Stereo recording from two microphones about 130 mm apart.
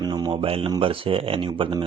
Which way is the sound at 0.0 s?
35° right (ahead or behind).